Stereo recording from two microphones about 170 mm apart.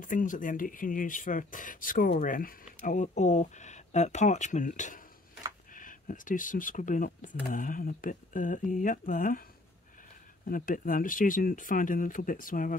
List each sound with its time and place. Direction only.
0.1 s speech: 50° left (ahead or behind)
10.5 s speech: 55° left (ahead or behind)